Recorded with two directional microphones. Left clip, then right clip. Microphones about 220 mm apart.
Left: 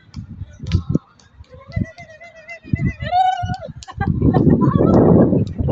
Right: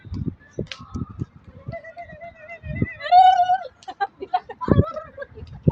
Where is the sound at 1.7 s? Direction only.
35° left (ahead or behind).